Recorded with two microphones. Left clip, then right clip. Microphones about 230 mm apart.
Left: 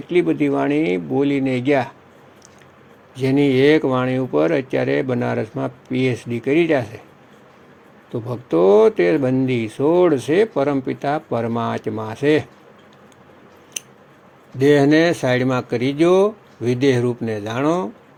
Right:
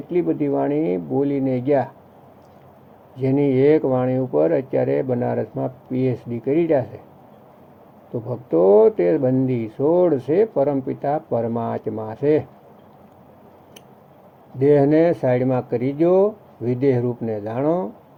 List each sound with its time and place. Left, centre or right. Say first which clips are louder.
0.1 s speech: left 3 dB; left
3.2 s speech: left 2 dB; left
8.1 s speech: left 1 dB; left
14.6 s speech: left 1 dB; left